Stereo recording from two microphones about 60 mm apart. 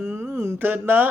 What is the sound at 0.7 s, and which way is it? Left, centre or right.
Mantra, right.